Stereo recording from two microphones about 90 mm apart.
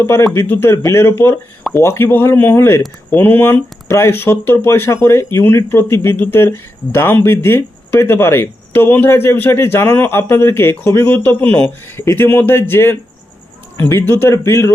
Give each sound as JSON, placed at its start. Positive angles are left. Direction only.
{"t": 0.0, "sound": "speech", "side_deg": 30}